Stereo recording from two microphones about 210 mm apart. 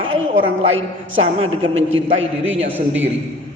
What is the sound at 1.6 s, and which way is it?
A man's voice, 65° right (ahead or behind).